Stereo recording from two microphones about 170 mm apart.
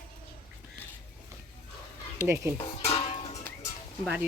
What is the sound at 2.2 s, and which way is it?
Speech, 15° right (ahead or behind).